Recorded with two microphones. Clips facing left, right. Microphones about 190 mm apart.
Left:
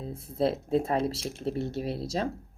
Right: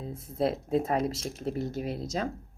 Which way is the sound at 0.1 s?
30° left (ahead or behind).